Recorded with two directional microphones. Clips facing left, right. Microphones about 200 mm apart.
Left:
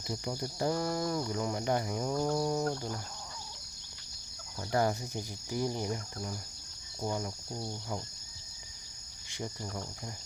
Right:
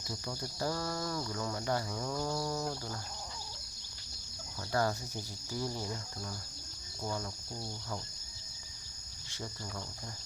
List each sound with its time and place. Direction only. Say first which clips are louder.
0.1 s speech: left 5 dB; 20° left (ahead or behind)
4.7 s speech: left 3 dB; 20° left (ahead or behind)
9.3 s speech: left 4 dB; 15° left (ahead or behind)